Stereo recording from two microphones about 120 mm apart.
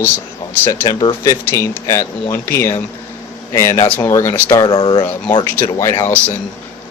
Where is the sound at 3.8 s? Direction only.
15° left (ahead or behind).